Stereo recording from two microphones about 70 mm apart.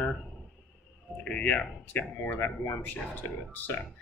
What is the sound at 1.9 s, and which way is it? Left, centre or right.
Speech, left.